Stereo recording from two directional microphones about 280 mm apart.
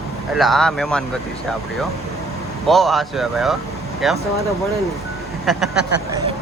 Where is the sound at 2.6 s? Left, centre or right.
Centre.